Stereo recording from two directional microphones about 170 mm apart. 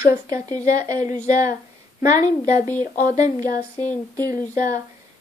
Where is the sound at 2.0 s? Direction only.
20° right (ahead or behind).